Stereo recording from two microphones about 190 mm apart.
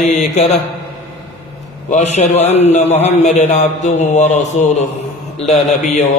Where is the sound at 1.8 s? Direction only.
35° left (ahead or behind).